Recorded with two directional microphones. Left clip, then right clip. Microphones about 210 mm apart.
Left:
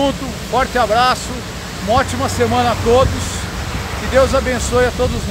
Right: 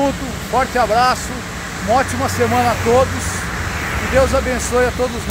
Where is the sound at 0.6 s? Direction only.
Centre (ahead or behind).